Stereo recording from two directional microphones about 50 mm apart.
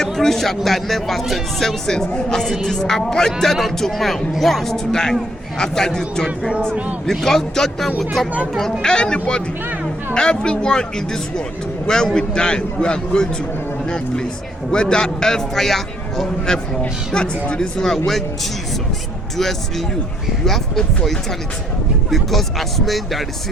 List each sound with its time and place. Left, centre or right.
0.0 s speech: centre
8.8 s speech: centre
20.4 s speech: centre